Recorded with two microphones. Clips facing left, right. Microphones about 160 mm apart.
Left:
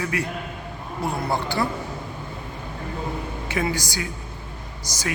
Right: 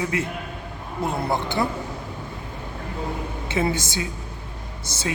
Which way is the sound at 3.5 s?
25° right (ahead or behind).